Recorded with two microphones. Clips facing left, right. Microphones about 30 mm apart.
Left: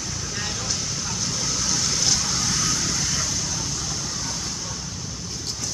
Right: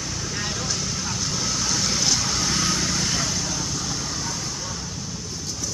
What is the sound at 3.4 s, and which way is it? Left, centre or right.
Vehicle, centre.